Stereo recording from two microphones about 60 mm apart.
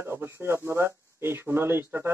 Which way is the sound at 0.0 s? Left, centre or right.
Right.